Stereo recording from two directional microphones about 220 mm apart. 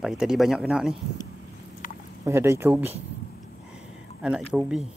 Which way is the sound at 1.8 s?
40° left (ahead or behind).